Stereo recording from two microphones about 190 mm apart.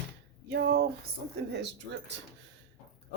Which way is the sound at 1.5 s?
65° right (ahead or behind).